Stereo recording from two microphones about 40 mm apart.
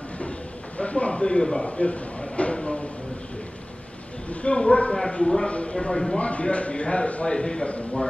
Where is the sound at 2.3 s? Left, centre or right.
Left.